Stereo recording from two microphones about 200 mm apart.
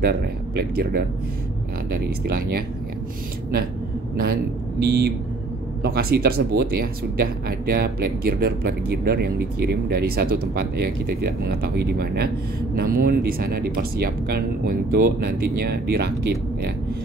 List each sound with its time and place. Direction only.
0.0 s speech: 50° right (ahead or behind)
4.7 s speech: 55° right (ahead or behind)